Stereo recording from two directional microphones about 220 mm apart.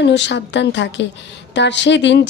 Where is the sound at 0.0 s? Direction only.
55° left (ahead or behind).